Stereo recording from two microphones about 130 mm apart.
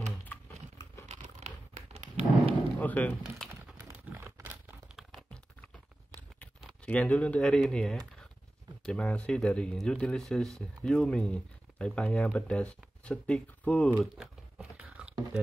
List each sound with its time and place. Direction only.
1.1 s crumpling: 60° right (ahead or behind)
2.8 s speech: 10° left (ahead or behind)
4.1 s crumpling: 15° right (ahead or behind)
4.9 s computer keyboard: 5° left (ahead or behind)
6.4 s speech: 10° left (ahead or behind)
13.9 s a sound: 5° right (ahead or behind)